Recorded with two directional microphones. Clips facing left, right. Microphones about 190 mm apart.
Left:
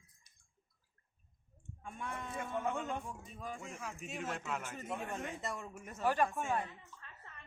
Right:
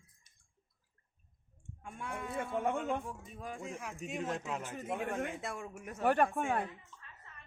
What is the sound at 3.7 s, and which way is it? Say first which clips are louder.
A man's voice: right 4 dB; 15° right (ahead or behind).